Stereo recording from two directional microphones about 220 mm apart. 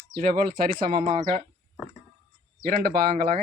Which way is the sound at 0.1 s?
40° right (ahead or behind).